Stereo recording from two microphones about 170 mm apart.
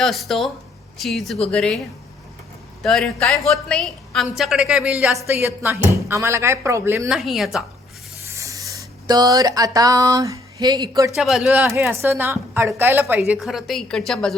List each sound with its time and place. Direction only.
0.0 s a woman's voice: centre (ahead or behind)
2.8 s a woman's voice: 5° left (ahead or behind); by 7.1 s 15° right (ahead or behind)
7.1 s a woman's voice: centre (ahead or behind)
8.3 s a sound: 20° right (ahead or behind)
11.2 s a woman's voice: centre (ahead or behind)